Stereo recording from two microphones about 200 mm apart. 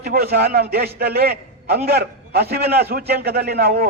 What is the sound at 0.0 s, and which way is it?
A man's voice, 50° right (ahead or behind).